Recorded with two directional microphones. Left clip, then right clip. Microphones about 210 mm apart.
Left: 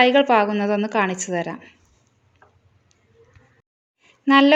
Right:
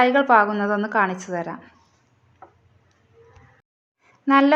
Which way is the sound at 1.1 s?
50° left (ahead or behind).